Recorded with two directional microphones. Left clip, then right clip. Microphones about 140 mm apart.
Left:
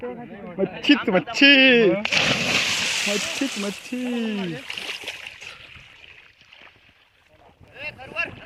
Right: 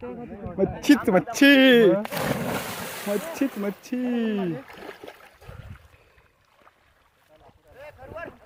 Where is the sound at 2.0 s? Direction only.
40° right (ahead or behind).